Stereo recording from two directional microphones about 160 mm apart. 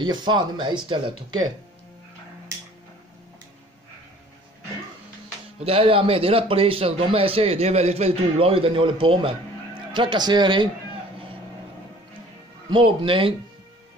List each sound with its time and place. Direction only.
0.0 s speech: 30° right (ahead or behind)
5.6 s speech: 40° right (ahead or behind)
12.6 s speech: 30° right (ahead or behind)